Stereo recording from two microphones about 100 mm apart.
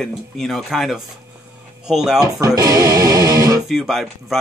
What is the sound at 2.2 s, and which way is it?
Speech, 35° right (ahead or behind).